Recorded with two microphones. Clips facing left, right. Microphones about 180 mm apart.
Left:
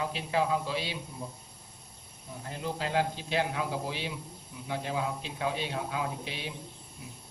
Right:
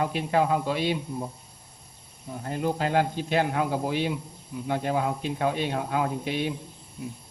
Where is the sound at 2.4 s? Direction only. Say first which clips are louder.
Right 8 dB; 55° right (ahead or behind).